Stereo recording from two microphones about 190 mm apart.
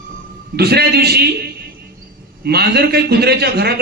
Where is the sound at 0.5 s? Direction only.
55° right (ahead or behind).